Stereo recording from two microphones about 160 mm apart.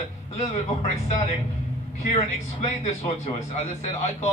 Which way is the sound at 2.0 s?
40° left (ahead or behind).